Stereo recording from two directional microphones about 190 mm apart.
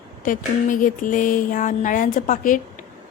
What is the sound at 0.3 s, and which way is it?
Speech, 45° left (ahead or behind).